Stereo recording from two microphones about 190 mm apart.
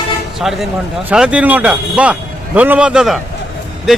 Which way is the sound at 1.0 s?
5° right (ahead or behind).